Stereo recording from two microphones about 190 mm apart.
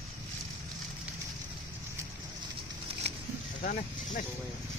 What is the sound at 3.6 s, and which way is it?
Speech, 45° left (ahead or behind).